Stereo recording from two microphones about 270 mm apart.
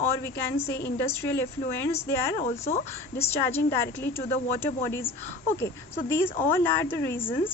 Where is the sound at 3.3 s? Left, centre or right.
Centre.